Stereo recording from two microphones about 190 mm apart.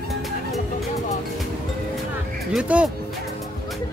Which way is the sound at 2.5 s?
5° right (ahead or behind).